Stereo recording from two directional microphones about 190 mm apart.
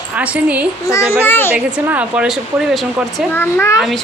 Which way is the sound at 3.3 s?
10° left (ahead or behind).